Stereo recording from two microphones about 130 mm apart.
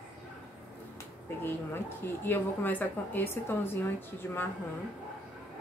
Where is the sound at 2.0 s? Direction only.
15° left (ahead or behind).